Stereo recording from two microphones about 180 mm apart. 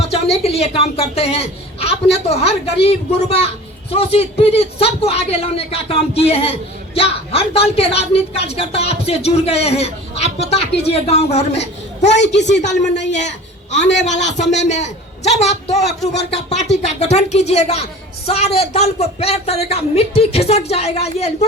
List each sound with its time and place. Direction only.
0.0 s speech: 35° left (ahead or behind)
12.0 s a woman's voice: 75° left (ahead or behind)
12.6 s speech: 40° left (ahead or behind)